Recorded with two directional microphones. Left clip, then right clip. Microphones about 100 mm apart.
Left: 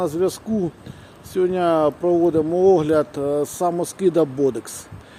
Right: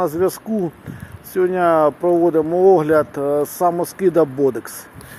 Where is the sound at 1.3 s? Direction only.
20° left (ahead or behind).